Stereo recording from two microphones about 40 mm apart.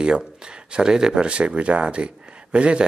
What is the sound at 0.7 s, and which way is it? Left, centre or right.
Speech, right.